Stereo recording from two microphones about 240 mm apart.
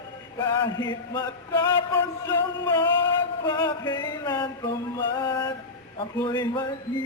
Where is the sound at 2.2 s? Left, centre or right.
Centre.